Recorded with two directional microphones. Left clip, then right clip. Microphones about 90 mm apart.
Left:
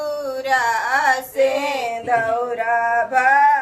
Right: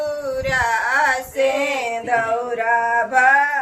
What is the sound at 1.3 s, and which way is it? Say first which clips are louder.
Male singing: even; 20° right (ahead or behind).